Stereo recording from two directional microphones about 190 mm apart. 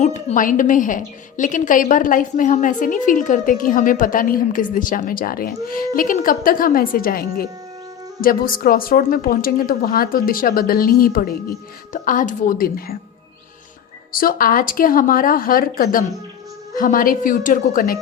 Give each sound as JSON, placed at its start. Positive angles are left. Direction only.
{"t": 0.0, "sound": "a woman's voice", "side_deg": 40}
{"t": 14.1, "sound": "a woman's voice", "side_deg": 50}